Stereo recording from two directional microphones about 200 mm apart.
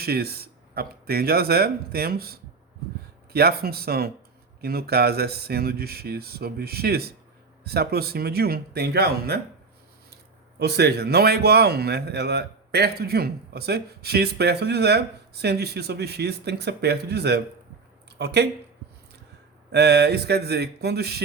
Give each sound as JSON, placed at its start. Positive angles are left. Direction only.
{"t": 0.0, "sound": "a man's voice", "side_deg": -50}
{"t": 10.6, "sound": "a man's voice", "side_deg": -55}
{"t": 19.7, "sound": "speech", "side_deg": -55}